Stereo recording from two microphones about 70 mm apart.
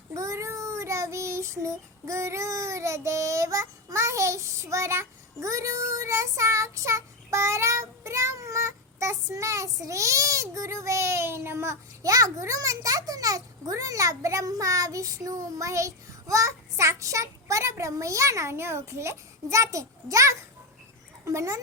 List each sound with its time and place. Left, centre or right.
0.1 s child singing: right